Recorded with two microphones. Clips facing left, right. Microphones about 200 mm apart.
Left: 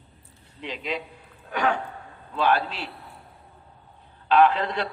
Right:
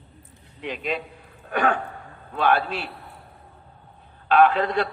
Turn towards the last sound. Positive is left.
turn(degrees=-50)  # may be behind; listen again after turning